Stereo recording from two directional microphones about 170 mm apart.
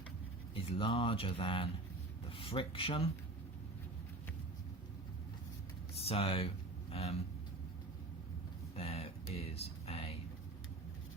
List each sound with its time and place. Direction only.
0.5 s speech: 30° left (ahead or behind)
6.0 s speech: 35° left (ahead or behind)
8.7 s a sound: 35° left (ahead or behind)